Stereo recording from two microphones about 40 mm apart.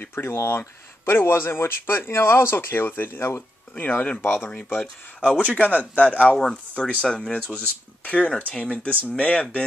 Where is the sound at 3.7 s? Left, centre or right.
Left.